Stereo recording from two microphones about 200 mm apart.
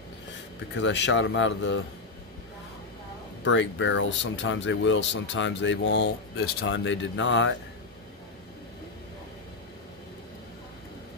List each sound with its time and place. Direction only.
0.7 s a man's voice: 65° left (ahead or behind)
3.4 s speech: 70° left (ahead or behind)